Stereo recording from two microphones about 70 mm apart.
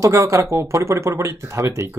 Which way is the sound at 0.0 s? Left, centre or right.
Right.